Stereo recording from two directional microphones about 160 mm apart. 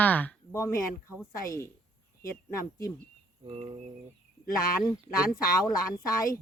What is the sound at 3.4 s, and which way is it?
Cricket, 40° right (ahead or behind).